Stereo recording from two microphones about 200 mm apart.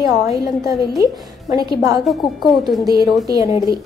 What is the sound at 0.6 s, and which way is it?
A woman's voice, 15° right (ahead or behind).